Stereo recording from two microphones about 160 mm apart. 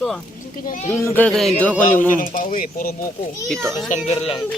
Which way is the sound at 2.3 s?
60° left (ahead or behind).